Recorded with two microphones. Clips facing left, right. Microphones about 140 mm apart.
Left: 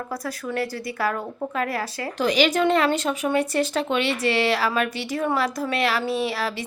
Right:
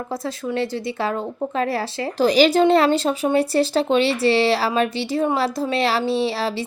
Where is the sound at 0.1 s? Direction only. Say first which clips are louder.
Right 5 dB; 25° right (ahead or behind).